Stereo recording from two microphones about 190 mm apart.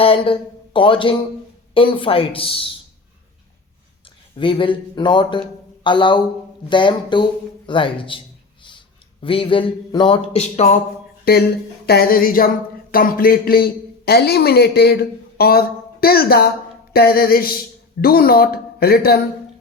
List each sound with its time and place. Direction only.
0.0 s speech: 30° left (ahead or behind)
4.4 s speech: 25° left (ahead or behind)
9.2 s speech: 25° left (ahead or behind)
11.3 s speech: 55° left (ahead or behind)